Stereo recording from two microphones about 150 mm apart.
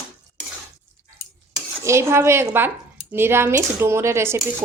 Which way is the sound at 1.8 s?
20° right (ahead or behind).